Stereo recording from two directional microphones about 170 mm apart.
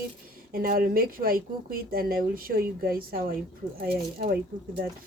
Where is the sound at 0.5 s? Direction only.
60° right (ahead or behind).